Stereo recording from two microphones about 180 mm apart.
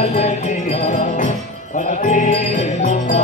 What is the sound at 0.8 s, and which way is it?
Music, 40° left (ahead or behind).